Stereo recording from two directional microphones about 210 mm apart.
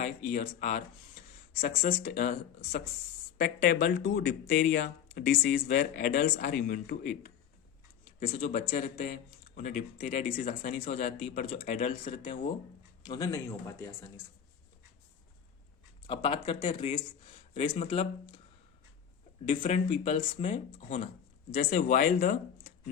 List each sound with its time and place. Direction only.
0.0 s speech: 40° left (ahead or behind)
2.0 s speech: 45° left (ahead or behind)
3.3 s speech: 40° left (ahead or behind)
13.1 s speech: 15° left (ahead or behind)
16.0 s speech: 25° left (ahead or behind)
19.5 s speech: 25° left (ahead or behind)
19.9 s speech: 35° left (ahead or behind)